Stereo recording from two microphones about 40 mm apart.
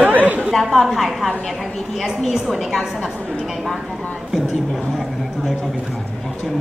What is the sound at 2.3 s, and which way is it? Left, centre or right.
Speech, centre.